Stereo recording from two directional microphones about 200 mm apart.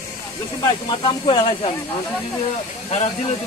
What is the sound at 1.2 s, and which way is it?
Speech, 25° left (ahead or behind).